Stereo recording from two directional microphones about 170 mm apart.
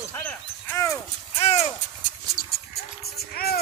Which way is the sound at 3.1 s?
65° left (ahead or behind).